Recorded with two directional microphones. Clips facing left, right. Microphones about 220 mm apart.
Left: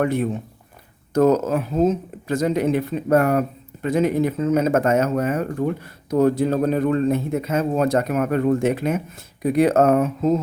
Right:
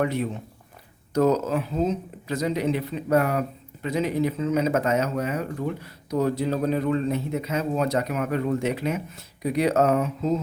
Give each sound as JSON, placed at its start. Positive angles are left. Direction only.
{"t": 0.0, "sound": "speech", "side_deg": 50}